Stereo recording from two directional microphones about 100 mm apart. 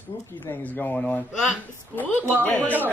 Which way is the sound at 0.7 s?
15° left (ahead or behind).